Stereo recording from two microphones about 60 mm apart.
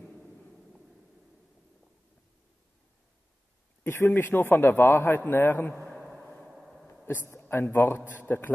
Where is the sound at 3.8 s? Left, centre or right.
Left.